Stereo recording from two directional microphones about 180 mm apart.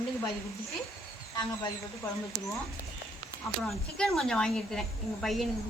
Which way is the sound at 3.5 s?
Centre (ahead or behind).